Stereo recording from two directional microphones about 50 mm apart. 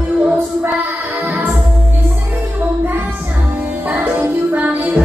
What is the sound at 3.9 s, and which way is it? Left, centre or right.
Music, right.